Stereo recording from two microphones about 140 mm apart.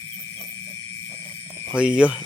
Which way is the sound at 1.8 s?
10° right (ahead or behind).